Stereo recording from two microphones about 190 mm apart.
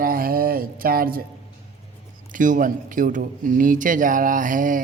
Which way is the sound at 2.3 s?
45° right (ahead or behind).